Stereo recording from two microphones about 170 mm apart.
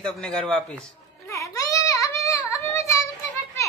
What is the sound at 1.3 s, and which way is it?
Baby cry, 20° left (ahead or behind).